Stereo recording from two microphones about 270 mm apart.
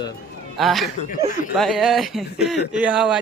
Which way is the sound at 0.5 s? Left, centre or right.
Centre.